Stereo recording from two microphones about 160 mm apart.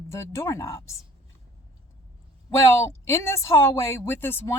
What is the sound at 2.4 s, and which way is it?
A woman's voice, 15° left (ahead or behind).